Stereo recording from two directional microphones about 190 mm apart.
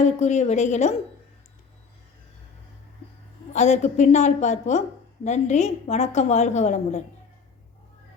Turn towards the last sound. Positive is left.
turn(degrees=40)  # may be behind; listen again after turning